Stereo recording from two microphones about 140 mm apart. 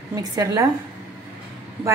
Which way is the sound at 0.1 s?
25° right (ahead or behind).